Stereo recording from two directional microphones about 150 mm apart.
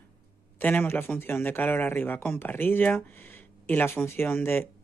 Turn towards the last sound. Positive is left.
turn(degrees=15)  # may be behind; listen again after turning